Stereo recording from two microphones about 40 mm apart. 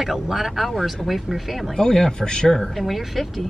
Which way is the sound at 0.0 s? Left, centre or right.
Centre.